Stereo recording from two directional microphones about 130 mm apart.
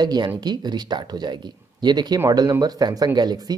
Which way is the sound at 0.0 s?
35° right (ahead or behind).